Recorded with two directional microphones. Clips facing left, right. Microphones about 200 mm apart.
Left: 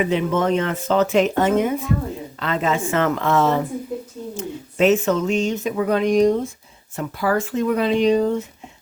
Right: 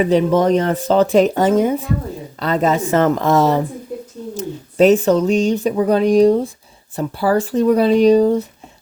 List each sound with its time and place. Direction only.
0.0 s speech: 35° right (ahead or behind)